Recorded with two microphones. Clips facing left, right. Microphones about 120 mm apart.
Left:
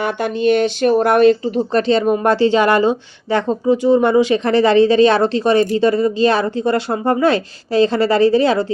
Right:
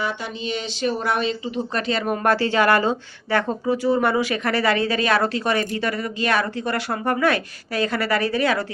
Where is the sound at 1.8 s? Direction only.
25° left (ahead or behind).